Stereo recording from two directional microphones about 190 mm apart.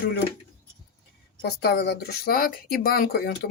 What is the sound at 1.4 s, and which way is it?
Speech, 55° left (ahead or behind).